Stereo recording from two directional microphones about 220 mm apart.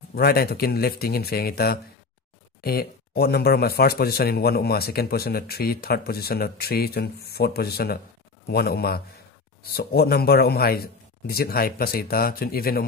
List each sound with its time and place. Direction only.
0.1 s speech: 45° left (ahead or behind)